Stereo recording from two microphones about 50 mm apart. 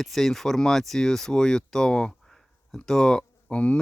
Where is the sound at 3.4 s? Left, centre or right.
Left.